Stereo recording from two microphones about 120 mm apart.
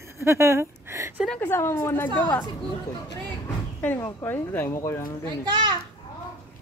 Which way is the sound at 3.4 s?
15° left (ahead or behind).